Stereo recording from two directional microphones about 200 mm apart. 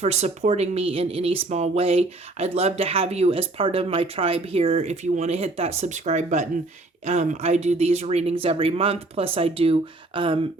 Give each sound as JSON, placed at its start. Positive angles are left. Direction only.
{"t": 0.0, "sound": "speech", "side_deg": -35}